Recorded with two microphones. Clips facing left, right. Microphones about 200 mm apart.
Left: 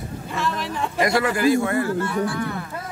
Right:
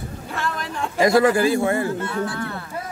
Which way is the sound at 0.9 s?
30° right (ahead or behind).